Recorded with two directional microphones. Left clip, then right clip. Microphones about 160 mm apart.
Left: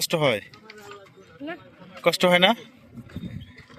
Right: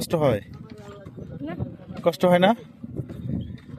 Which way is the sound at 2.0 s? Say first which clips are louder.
Even; 30° right (ahead or behind).